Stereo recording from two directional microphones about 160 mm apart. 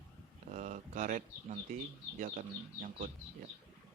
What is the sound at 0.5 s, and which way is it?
Speech, 50° right (ahead or behind).